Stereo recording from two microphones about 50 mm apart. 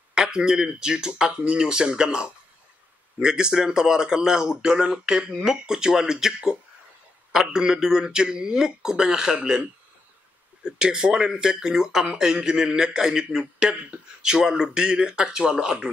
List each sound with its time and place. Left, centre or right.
0.1 s speech: centre